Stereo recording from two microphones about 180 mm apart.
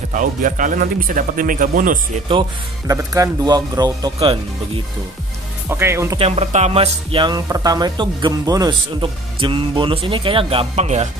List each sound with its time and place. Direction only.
0.1 s speech: 45° right (ahead or behind)
2.9 s speech: 20° right (ahead or behind)
5.7 s speech: 15° right (ahead or behind)
6.1 s speech: 35° right (ahead or behind)